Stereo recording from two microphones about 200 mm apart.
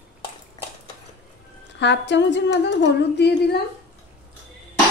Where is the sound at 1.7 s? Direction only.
60° left (ahead or behind).